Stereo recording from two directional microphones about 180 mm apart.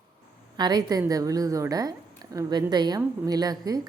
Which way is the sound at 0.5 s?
25° right (ahead or behind).